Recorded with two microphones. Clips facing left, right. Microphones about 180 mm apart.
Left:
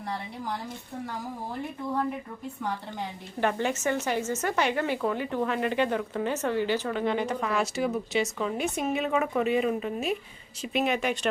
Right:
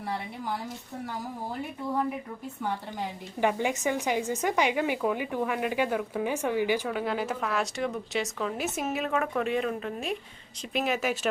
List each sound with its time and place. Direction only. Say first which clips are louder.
3.4 s speech: even; 15° right (ahead or behind)